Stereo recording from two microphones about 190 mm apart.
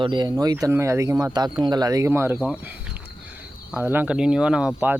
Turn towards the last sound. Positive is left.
turn(degrees=-10)  # may be behind; listen again after turning